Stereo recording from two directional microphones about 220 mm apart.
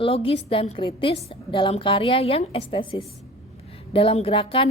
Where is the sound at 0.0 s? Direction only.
25° left (ahead or behind).